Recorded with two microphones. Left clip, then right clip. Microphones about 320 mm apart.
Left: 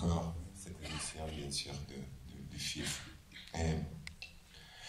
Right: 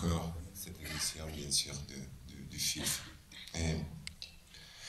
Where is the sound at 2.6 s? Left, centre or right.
Left.